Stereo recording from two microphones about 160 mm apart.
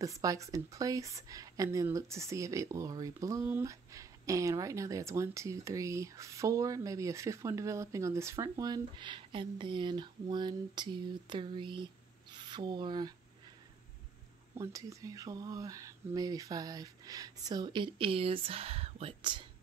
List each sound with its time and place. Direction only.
0.0 s speech: 20° right (ahead or behind)
14.5 s speech: 20° right (ahead or behind)